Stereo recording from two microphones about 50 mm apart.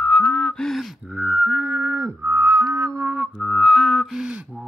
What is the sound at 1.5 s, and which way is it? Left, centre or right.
Music, right.